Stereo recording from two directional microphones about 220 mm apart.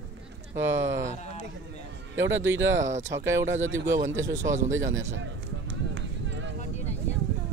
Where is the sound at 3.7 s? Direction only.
15° right (ahead or behind).